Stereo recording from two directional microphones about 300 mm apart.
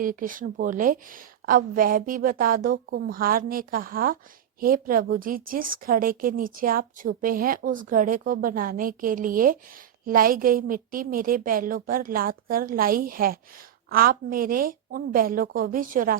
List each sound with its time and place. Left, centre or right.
0.0 s a woman's voice: right